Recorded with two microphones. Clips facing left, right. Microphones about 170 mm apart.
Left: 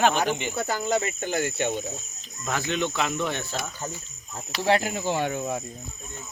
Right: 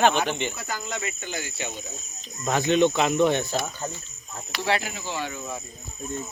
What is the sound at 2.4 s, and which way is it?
Speech, 20° right (ahead or behind).